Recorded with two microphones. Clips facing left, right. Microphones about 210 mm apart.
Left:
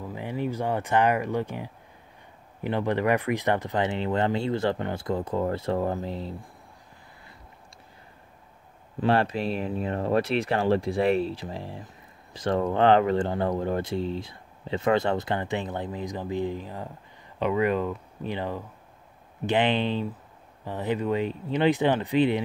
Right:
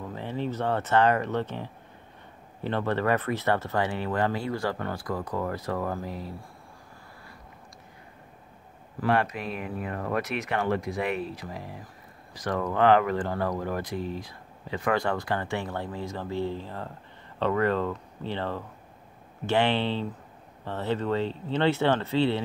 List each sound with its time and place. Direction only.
0.1 s speech: 15° left (ahead or behind)
9.0 s speech: 30° left (ahead or behind)